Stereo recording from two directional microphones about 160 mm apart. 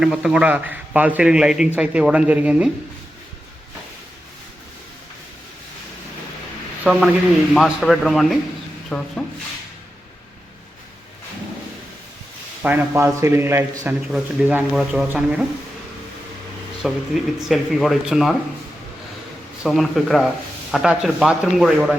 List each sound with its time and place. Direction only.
0.0 s a man's voice: 5° right (ahead or behind)
6.8 s speech: 5° right (ahead or behind)
12.6 s a man's voice: 15° right (ahead or behind)
16.8 s speech: 5° right (ahead or behind)
19.6 s speech: centre (ahead or behind)